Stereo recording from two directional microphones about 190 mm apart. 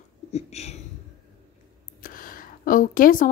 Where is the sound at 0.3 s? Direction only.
35° left (ahead or behind).